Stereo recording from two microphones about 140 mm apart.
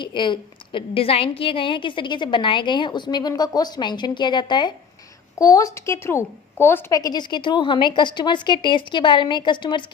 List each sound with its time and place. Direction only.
0.0 s a woman's voice: 35° left (ahead or behind)